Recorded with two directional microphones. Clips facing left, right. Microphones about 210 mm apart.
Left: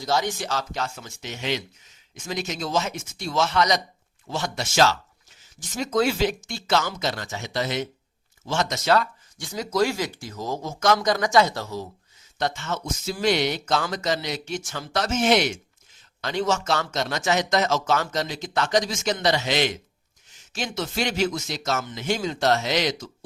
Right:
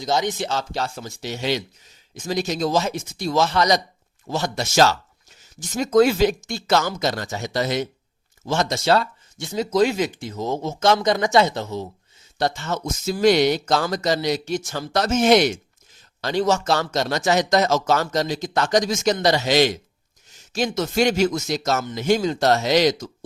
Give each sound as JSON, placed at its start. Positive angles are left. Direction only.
{"t": 0.0, "sound": "speech", "side_deg": -20}
{"t": 12.4, "sound": "speech", "side_deg": -35}